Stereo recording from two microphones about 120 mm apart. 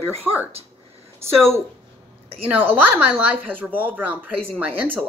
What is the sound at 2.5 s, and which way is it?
Speech, 15° right (ahead or behind).